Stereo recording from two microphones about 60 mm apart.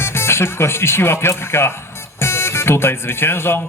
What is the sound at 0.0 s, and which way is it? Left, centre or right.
Speech, left.